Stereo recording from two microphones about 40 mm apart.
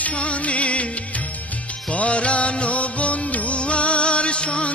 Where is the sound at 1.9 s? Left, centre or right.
Left.